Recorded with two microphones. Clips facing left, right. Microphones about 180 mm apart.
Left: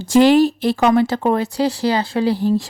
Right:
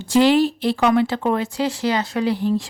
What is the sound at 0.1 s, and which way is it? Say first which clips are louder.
A woman's voice: left 3 dB; 45° left (ahead or behind).